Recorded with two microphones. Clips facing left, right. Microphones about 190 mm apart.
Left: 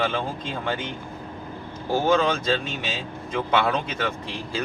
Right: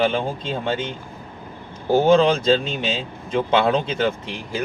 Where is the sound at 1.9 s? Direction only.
25° right (ahead or behind).